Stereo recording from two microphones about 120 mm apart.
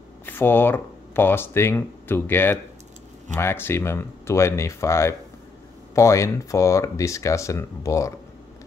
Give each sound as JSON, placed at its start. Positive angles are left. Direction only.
{"t": 0.3, "sound": "speech", "side_deg": 20}